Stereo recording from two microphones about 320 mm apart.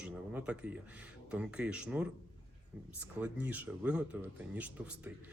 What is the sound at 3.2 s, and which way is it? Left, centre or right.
A man's voice, centre.